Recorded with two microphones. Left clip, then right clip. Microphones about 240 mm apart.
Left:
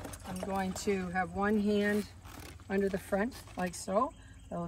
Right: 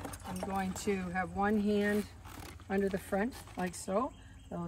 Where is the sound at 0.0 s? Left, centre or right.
Centre.